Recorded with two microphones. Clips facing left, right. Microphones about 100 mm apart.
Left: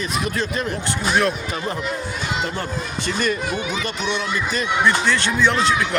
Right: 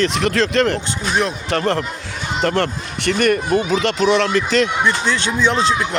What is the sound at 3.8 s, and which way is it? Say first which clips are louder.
Speech: right 9 dB; 90° right.